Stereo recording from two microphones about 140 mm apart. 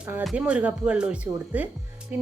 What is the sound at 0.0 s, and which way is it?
Speech, 15° right (ahead or behind).